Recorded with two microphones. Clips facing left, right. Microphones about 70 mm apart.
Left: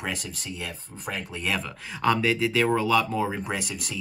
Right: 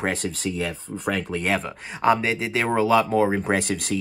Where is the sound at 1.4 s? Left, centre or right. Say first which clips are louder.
Right 1 dB; right.